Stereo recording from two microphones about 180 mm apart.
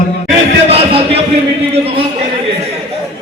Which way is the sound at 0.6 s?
35° right (ahead or behind).